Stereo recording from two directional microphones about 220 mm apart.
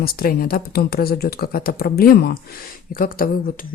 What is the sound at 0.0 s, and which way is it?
Speech, 40° left (ahead or behind).